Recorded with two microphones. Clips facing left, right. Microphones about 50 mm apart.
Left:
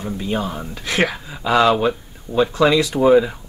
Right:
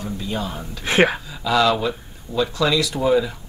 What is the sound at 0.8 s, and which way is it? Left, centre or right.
Speech, right.